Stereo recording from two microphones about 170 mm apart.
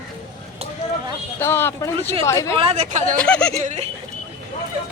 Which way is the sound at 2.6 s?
40° right (ahead or behind).